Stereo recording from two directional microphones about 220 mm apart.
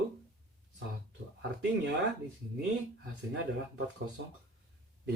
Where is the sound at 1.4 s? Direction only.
50° right (ahead or behind).